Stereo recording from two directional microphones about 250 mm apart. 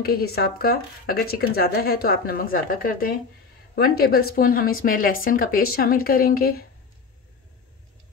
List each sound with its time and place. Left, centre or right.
0.0 s speech: left